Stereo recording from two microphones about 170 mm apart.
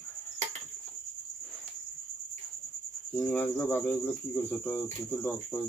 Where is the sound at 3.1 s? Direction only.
5° left (ahead or behind).